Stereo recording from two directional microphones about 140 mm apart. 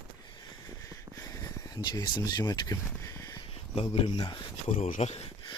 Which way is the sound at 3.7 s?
45° left (ahead or behind).